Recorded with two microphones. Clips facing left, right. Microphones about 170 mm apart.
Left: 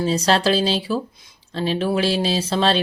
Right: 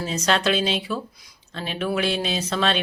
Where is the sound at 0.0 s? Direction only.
35° left (ahead or behind).